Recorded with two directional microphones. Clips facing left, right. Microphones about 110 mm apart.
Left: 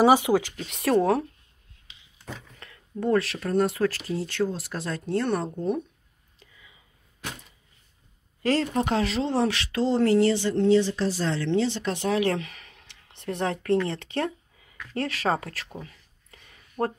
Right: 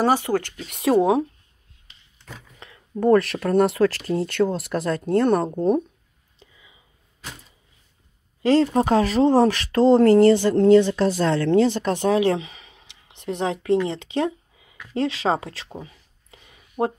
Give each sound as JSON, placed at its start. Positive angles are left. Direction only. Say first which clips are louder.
{"t": 0.0, "sound": "speech", "louder": "left 1 dB", "side_deg": 10}
{"t": 0.8, "sound": "speech", "louder": "right 4 dB", "side_deg": -15}
{"t": 3.0, "sound": "speech", "louder": "right 7 dB", "side_deg": -50}
{"t": 4.1, "sound": "speech", "louder": "right 6 dB", "side_deg": -60}
{"t": 6.4, "sound": "whispering", "louder": "right 4 dB", "side_deg": -25}
{"t": 8.4, "sound": "speech", "louder": "right 6 dB", "side_deg": -25}
{"t": 12.1, "sound": "a sound", "louder": "right 5 dB", "side_deg": -20}